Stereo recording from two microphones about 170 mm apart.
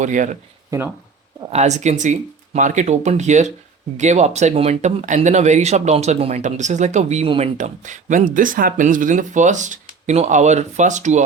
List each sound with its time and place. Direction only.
0.0 s speech: 45° right (ahead or behind)
1.5 s speech: 40° right (ahead or behind)